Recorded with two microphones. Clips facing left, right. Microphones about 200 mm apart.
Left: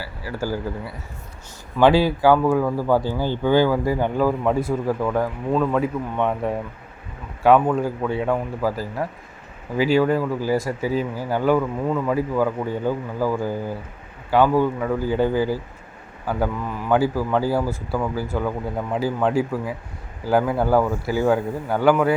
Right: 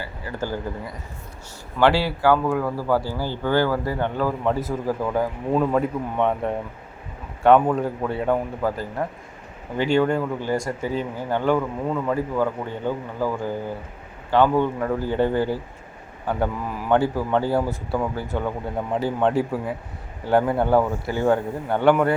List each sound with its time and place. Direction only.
0.0 s speech: 10° left (ahead or behind)
4.9 s a man's voice: 5° right (ahead or behind)